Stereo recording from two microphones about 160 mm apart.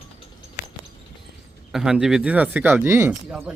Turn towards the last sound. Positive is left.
turn(degrees=-15)  # may be behind; listen again after turning